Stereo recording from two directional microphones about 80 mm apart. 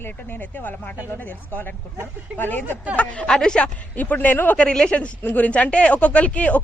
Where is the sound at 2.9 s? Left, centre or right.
Centre.